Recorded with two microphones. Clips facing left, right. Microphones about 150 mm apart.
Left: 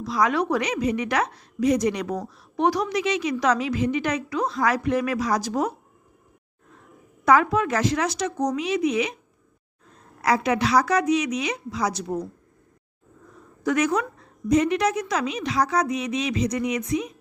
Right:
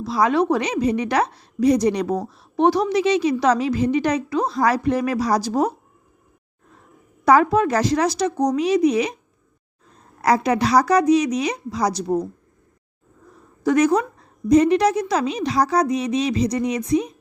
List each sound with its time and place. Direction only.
0.0 s a woman's voice: 30° right (ahead or behind)
7.3 s a woman's voice: 35° right (ahead or behind)
10.2 s a woman's voice: 40° right (ahead or behind)
13.7 s a woman's voice: 35° right (ahead or behind)